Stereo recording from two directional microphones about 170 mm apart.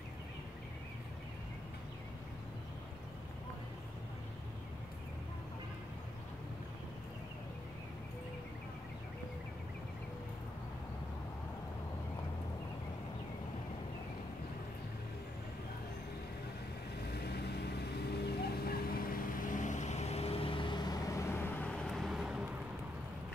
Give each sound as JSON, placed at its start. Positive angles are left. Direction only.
{"t": 17.1, "sound": "vehicle", "side_deg": 70}